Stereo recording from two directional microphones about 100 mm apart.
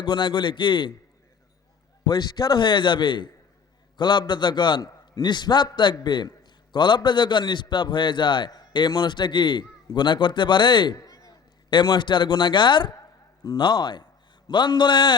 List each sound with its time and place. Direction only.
0.0 s a man's voice: 50° left (ahead or behind)
2.0 s a man's voice: 40° left (ahead or behind)
10.9 s a man's voice: 35° left (ahead or behind); by 15.1 s 50° left (ahead or behind)